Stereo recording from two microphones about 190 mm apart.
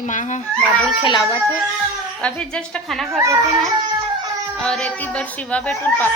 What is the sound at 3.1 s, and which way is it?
Speech, 15° right (ahead or behind).